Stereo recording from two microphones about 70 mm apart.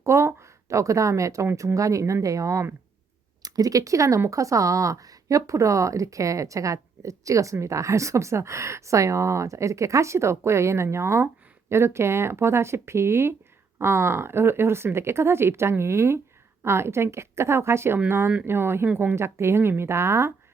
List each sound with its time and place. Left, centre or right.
0.0 s speech: right
3.4 s speech: right